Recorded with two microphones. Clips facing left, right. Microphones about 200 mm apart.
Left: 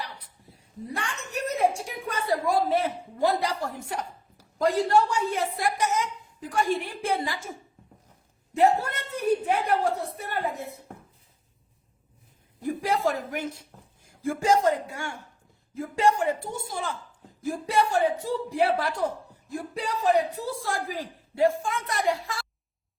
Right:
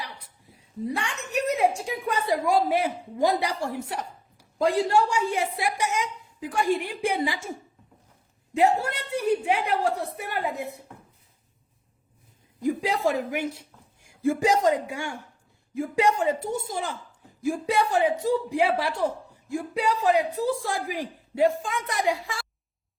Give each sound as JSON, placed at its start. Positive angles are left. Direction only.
{"t": 0.0, "sound": "a sound", "side_deg": -15}
{"t": 1.9, "sound": "a woman's voice", "side_deg": -15}
{"t": 8.5, "sound": "a woman's voice", "side_deg": -15}
{"t": 12.6, "sound": "a woman's voice", "side_deg": -15}